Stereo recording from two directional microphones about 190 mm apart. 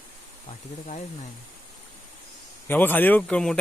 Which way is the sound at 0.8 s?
40° left (ahead or behind).